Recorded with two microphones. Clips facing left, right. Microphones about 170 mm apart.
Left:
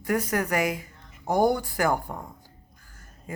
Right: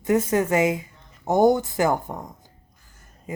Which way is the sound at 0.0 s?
25° right (ahead or behind).